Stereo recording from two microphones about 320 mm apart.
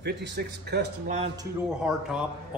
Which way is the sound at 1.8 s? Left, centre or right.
Centre.